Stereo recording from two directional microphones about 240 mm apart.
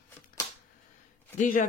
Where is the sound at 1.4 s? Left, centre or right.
Left.